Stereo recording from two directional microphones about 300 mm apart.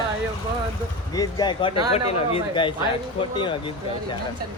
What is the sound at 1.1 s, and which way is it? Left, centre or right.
A woman's voice, centre.